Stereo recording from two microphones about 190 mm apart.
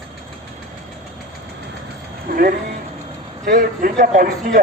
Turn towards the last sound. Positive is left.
turn(degrees=-45)  # may be behind; listen again after turning